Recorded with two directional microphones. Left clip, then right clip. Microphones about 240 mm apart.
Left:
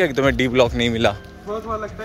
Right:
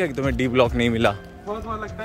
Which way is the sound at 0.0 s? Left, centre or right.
Centre.